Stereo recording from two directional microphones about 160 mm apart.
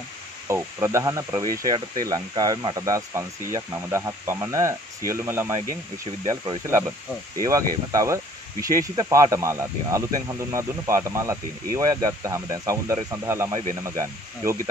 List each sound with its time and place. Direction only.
0.5 s speech: 15° right (ahead or behind)